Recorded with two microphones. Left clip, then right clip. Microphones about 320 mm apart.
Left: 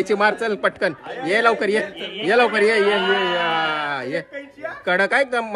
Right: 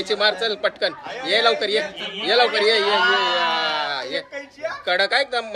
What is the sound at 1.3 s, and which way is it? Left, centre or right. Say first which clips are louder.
A man's voice: left 1 dB; left.